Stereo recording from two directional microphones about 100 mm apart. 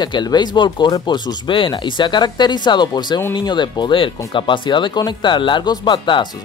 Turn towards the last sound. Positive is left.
turn(degrees=55)  # may be behind; listen again after turning